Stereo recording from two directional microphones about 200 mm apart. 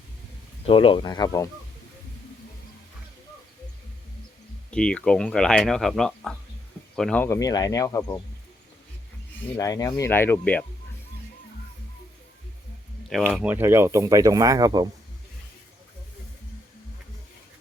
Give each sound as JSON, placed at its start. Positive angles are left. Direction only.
{"t": 0.6, "sound": "speech", "side_deg": 25}
{"t": 4.7, "sound": "speech", "side_deg": 5}
{"t": 9.6, "sound": "speech", "side_deg": 15}
{"t": 13.1, "sound": "speech", "side_deg": 0}